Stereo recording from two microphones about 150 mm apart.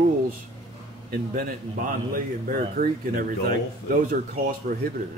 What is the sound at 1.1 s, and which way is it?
Speech, 70° right (ahead or behind).